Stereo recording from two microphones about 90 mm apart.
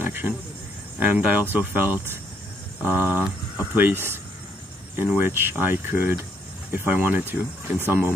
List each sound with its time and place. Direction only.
0.0 s cricket: 25° right (ahead or behind)
0.9 s speech: 20° right (ahead or behind)
4.9 s speech: 25° right (ahead or behind)